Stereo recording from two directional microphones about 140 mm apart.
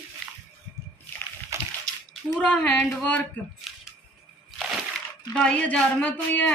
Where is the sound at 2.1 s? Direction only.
10° left (ahead or behind).